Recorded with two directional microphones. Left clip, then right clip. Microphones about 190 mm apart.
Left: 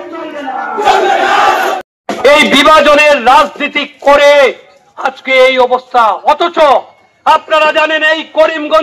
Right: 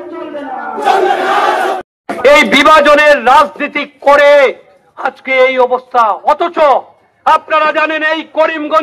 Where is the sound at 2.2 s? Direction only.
30° left (ahead or behind).